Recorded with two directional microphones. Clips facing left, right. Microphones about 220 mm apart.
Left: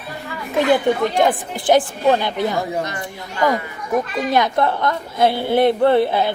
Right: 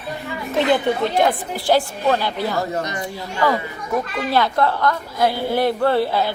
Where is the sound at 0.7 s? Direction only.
15° left (ahead or behind).